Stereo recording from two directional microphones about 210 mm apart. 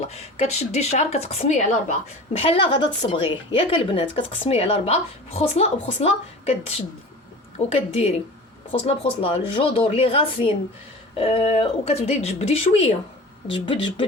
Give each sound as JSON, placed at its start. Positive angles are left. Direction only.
{"t": 0.1, "sound": "a woman's voice", "side_deg": 30}